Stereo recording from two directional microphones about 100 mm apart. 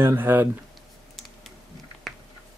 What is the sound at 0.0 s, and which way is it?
Speech, 20° right (ahead or behind).